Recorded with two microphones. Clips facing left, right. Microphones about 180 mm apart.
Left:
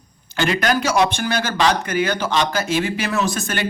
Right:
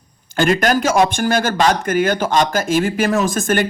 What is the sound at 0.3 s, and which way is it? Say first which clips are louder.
Speech: right 4 dB; 50° right (ahead or behind).